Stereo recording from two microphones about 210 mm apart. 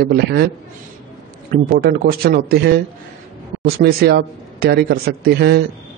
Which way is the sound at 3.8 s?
50° right (ahead or behind).